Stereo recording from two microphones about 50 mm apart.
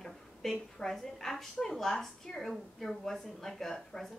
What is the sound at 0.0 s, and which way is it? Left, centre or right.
A woman's voice, centre.